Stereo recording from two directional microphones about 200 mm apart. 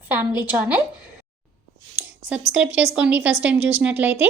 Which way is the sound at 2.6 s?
5° right (ahead or behind).